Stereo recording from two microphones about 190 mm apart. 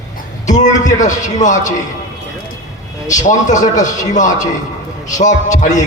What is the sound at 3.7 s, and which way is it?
Speech, 20° left (ahead or behind).